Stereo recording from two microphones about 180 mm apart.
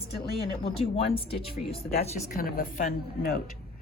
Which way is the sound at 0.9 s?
30° left (ahead or behind).